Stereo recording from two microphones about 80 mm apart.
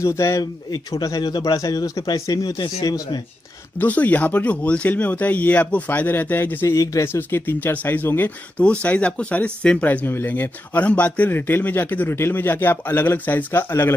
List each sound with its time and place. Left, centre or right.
0.0 s speech: left
1.0 s speech: left
2.6 s speech: left
3.8 s speech: centre; by 7.2 s left
7.2 s speech: left